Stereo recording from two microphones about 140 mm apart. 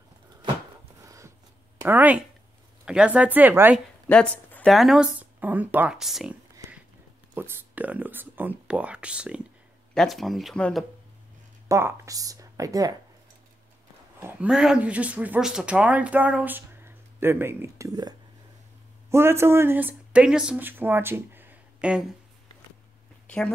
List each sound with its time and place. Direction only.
1.0 s a sound: 20° right (ahead or behind)
1.8 s speech: 15° right (ahead or behind)
4.1 s a sound: 10° left (ahead or behind)
4.6 s speech: centre (ahead or behind)
7.3 s speech: 15° right (ahead or behind); by 10.9 s 5° left (ahead or behind)
11.7 s speech: 20° right (ahead or behind)
14.2 s speech: 5° right (ahead or behind)
23.2 s speech: 10° left (ahead or behind)